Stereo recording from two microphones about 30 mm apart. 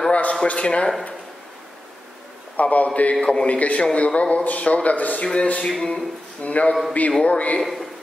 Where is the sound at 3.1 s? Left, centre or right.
Left.